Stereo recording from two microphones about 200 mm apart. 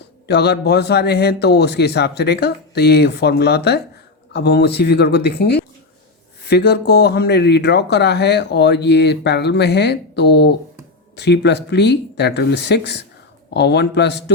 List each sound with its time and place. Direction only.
0.3 s speech: 55° left (ahead or behind)